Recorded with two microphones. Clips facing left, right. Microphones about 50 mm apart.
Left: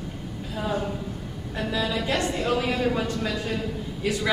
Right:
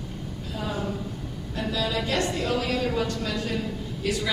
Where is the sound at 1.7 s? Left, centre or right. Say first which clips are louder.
Left 1 dB; centre.